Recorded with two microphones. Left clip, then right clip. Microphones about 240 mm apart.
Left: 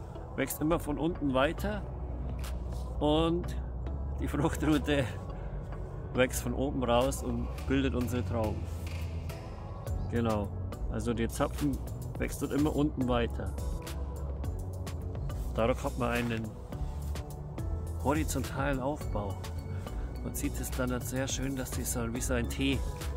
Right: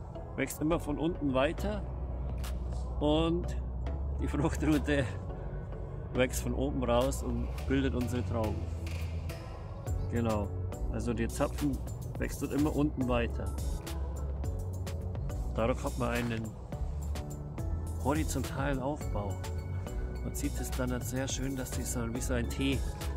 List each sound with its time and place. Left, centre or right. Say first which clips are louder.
0.4 s speech: left 1 dB; centre
3.0 s speech: left 1 dB; centre
6.1 s speech: left 2 dB; centre
10.1 s speech: left 1 dB; centre
15.5 s speech: left 2 dB; centre
18.0 s speech: left 1 dB; centre
20.2 s speech: left 1 dB; centre